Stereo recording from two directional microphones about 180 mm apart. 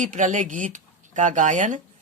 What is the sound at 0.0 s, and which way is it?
Speech, 45° right (ahead or behind).